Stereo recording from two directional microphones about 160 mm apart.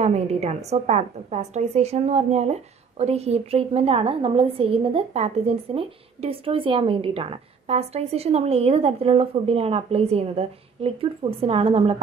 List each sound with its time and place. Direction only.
0.0 s a woman's voice: 45° right (ahead or behind)